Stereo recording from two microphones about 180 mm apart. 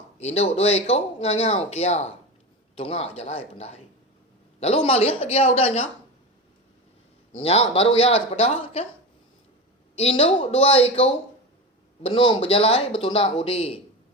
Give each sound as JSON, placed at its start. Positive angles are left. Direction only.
{"t": 0.2, "sound": "speech", "side_deg": 35}
{"t": 7.3, "sound": "speech", "side_deg": 35}
{"t": 9.9, "sound": "speech", "side_deg": 35}